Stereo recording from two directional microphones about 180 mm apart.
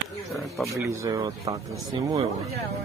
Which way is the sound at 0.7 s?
15° right (ahead or behind).